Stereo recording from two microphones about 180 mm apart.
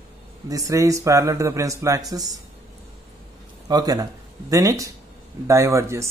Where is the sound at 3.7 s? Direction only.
20° right (ahead or behind).